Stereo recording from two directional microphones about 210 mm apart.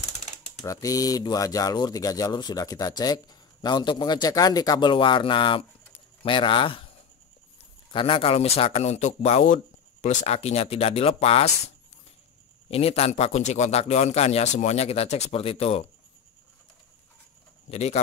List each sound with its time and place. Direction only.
0.7 s speech: 15° left (ahead or behind)
7.9 s speech: 25° left (ahead or behind)
12.6 s a man's voice: 30° left (ahead or behind)
17.6 s speech: 30° left (ahead or behind)